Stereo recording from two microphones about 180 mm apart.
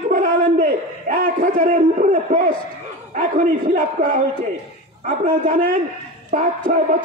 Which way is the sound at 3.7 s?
50° right (ahead or behind).